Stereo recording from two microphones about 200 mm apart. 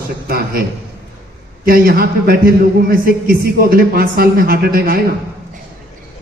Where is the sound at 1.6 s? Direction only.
45° right (ahead or behind).